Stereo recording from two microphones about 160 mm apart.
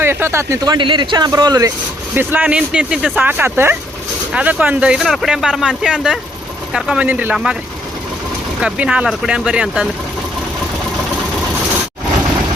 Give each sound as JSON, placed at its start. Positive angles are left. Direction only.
{"t": 0.0, "sound": "speech", "side_deg": -15}
{"t": 2.1, "sound": "speech", "side_deg": -10}
{"t": 8.6, "sound": "speech", "side_deg": -5}